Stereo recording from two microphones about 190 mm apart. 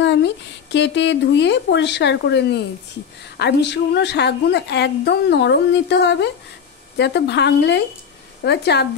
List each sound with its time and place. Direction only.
0.7 s a woman's voice: 65° left (ahead or behind)